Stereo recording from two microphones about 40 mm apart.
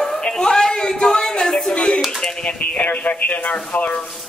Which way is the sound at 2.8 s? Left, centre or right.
Left.